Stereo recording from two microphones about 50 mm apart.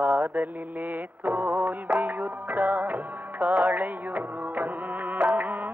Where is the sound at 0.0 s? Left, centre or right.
Right.